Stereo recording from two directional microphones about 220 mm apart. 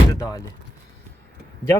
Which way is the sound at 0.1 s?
15° left (ahead or behind).